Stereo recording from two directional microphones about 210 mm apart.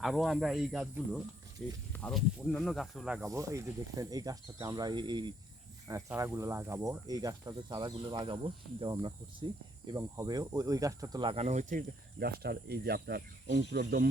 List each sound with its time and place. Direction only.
0.0 s speech: centre (ahead or behind)
3.2 s speech: 15° right (ahead or behind); by 14.1 s 50° right (ahead or behind)